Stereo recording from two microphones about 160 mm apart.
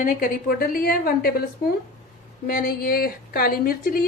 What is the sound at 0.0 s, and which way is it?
A woman's voice, 65° left (ahead or behind).